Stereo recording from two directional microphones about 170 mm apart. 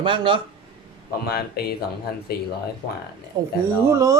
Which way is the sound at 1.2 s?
65° left (ahead or behind).